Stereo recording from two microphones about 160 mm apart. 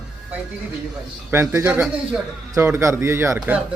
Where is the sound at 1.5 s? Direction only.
15° right (ahead or behind).